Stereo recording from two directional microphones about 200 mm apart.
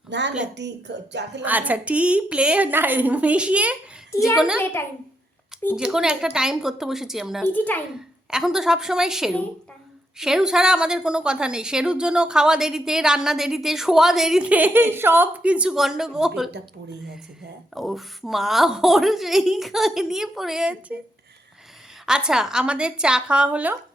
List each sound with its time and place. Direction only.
0.1 s a woman's voice: 60° right (ahead or behind)
1.4 s a woman's voice: 10° right (ahead or behind)
4.6 s a child's voice: 10° left (ahead or behind)
5.7 s a woman's voice: 5° right (ahead or behind)
7.4 s a child's voice: 10° left (ahead or behind)
8.3 s a woman's voice: 5° right (ahead or behind)
17.7 s a woman's voice: centre (ahead or behind)
22.0 s a woman's voice: 5° right (ahead or behind)